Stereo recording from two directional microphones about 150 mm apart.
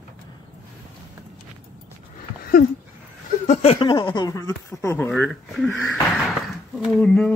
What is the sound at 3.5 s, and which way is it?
Speech, 45° left (ahead or behind).